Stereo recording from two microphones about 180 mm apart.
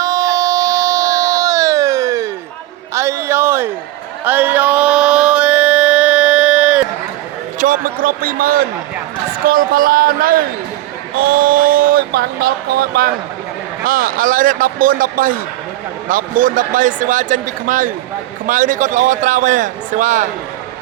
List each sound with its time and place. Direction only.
0.0 s a sound: 20° right (ahead or behind)
4.2 s music: 10° right (ahead or behind)
7.6 s a man's voice: 50° right (ahead or behind)